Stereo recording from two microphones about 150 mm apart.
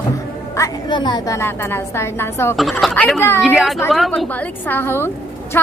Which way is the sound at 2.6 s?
Centre (ahead or behind).